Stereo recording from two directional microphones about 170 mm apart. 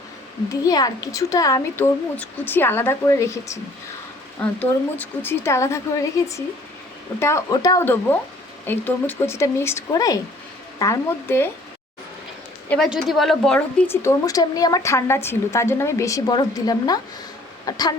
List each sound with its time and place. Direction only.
0.6 s a woman's voice: 20° left (ahead or behind)
12.6 s a woman's voice: 5° left (ahead or behind)
13.9 s a woman's voice: 15° left (ahead or behind)